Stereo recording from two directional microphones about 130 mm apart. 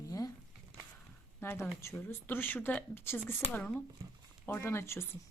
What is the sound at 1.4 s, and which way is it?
A woman's voice, 15° left (ahead or behind).